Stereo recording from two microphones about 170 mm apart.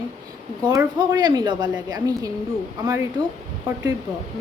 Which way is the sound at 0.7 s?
20° right (ahead or behind).